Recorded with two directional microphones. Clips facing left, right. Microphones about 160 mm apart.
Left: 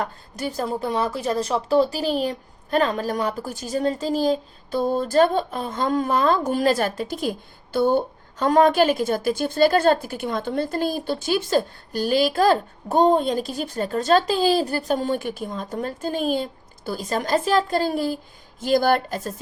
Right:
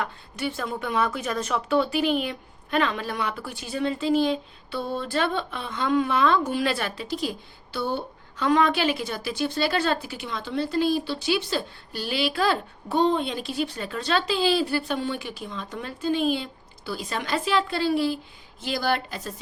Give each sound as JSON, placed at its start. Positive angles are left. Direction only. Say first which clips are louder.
{"t": 0.0, "sound": "speech", "louder": "left 2 dB", "side_deg": 40}